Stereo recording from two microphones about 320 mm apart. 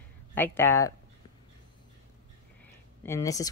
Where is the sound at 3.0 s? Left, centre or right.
Centre.